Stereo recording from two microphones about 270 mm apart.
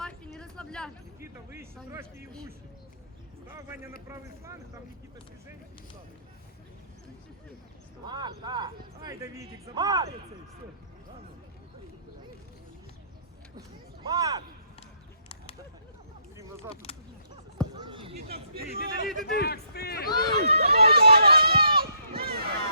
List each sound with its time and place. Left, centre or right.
0.0 s a sound: centre
1.2 s a sound: centre
1.9 s speech: centre
4.1 s speech: centre
8.0 s speech: centre
13.6 s speech: centre
16.9 s a sound: left
17.7 s basketball bounce: centre
18.1 s a man's voice: right
19.3 s speech: left
20.1 s speech: centre
20.7 s run: right